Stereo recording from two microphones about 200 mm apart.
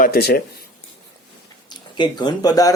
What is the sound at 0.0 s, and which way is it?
Speech, 50° left (ahead or behind).